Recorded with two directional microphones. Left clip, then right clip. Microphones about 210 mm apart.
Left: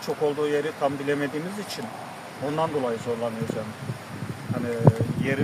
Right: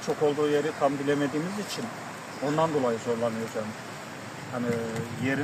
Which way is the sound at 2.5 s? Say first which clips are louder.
Even; centre (ahead or behind).